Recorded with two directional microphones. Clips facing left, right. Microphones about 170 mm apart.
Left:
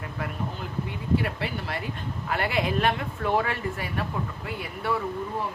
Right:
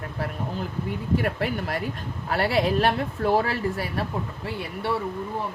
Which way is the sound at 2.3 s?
35° right (ahead or behind).